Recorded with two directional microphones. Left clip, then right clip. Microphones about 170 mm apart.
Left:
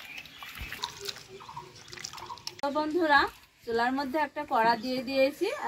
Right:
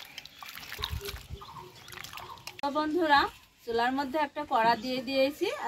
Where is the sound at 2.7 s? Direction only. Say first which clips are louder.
Left 1 dB; 5° right (ahead or behind).